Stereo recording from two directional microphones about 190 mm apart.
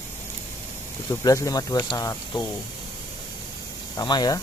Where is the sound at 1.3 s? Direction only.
20° left (ahead or behind).